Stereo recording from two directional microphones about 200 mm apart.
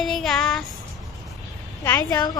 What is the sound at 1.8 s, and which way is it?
Speech, 15° left (ahead or behind).